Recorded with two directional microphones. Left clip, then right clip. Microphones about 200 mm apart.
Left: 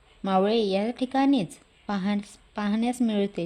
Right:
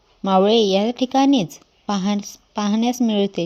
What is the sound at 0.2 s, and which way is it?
A woman's voice, 25° right (ahead or behind).